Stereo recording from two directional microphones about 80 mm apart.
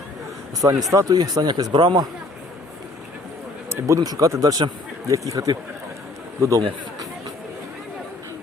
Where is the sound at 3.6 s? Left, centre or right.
Right.